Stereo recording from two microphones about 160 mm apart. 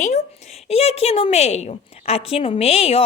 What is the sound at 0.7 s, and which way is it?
A woman's voice, 40° left (ahead or behind).